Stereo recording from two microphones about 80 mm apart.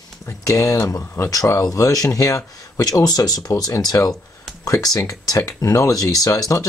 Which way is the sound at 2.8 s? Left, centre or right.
Left.